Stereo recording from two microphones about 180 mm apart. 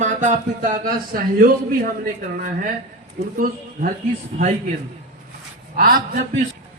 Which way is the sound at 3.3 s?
50° right (ahead or behind).